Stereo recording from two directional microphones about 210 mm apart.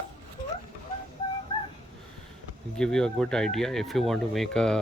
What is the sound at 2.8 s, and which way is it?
Speech, 5° left (ahead or behind).